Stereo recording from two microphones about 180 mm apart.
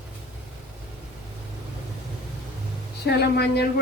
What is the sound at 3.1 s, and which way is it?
Speech, 65° left (ahead or behind).